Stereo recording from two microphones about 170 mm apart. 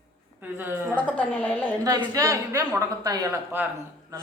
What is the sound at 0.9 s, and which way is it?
Speech, 10° left (ahead or behind).